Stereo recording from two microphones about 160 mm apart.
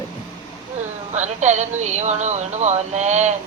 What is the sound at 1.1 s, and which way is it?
Speech, 45° right (ahead or behind).